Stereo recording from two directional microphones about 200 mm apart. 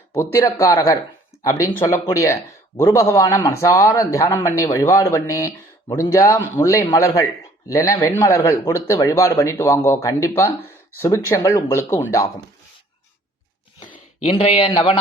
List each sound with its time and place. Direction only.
0.1 s speech: 10° left (ahead or behind)
13.8 s speech: 35° left (ahead or behind)